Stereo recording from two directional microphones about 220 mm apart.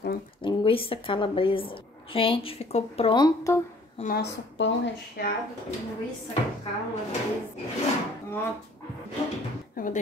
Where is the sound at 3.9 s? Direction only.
40° left (ahead or behind).